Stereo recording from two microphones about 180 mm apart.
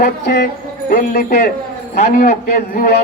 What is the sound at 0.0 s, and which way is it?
A man's voice, 65° left (ahead or behind).